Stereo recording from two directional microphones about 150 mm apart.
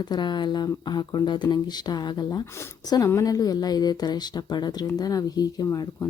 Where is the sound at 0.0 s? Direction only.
30° left (ahead or behind).